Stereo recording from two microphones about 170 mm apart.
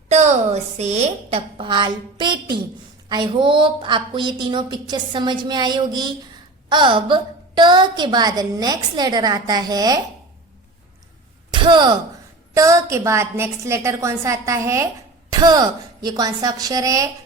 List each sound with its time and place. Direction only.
0.1 s a woman's voice: 40° right (ahead or behind); by 10.0 s 20° right (ahead or behind)
11.5 s a woman's voice: 25° right (ahead or behind)